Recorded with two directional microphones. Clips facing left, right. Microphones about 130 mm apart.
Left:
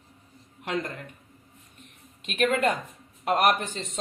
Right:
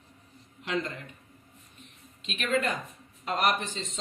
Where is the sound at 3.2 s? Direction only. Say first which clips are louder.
Left 5 dB; 60° left (ahead or behind).